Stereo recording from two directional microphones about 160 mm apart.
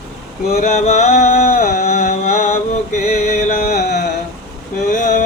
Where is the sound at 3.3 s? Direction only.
50° left (ahead or behind).